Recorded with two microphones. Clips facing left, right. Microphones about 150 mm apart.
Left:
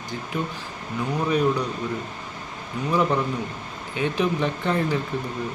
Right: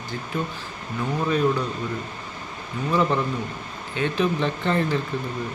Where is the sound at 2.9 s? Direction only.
10° left (ahead or behind).